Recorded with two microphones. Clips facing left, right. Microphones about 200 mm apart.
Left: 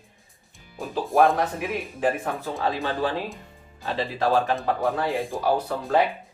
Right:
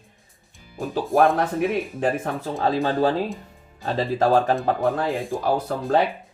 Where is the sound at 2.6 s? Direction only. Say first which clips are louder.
Right 6 dB; 40° right (ahead or behind).